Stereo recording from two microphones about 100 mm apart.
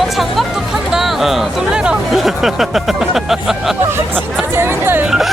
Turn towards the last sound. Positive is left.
turn(degrees=0)  # may be behind; listen again after turning